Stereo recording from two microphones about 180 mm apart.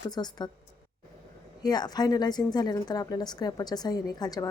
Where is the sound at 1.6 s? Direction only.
20° left (ahead or behind).